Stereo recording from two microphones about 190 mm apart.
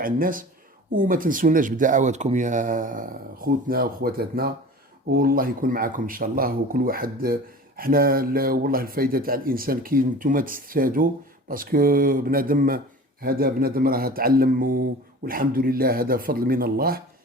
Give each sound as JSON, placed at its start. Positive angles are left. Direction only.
{"t": 0.0, "sound": "speech", "side_deg": -45}